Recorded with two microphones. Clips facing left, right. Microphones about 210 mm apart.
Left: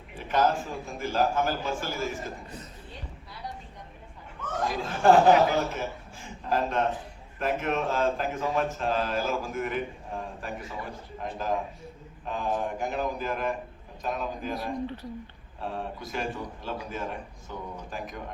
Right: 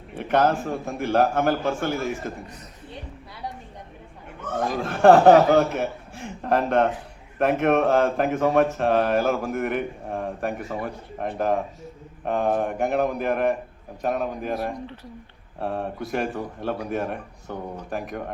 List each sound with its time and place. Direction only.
0.2 s speech: 65° right (ahead or behind)
4.8 s a man's voice: 65° right (ahead or behind)